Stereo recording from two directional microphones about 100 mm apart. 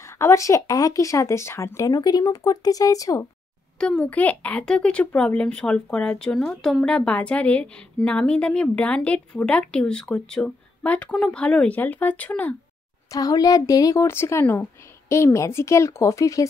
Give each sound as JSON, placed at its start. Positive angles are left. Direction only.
{"t": 0.2, "sound": "speech", "side_deg": 30}
{"t": 3.8, "sound": "speech", "side_deg": 10}
{"t": 13.1, "sound": "speech", "side_deg": 40}